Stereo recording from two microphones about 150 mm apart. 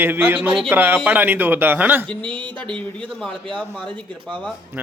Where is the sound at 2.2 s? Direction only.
30° right (ahead or behind).